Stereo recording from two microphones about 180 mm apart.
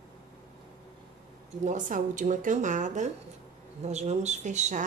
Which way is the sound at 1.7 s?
45° right (ahead or behind).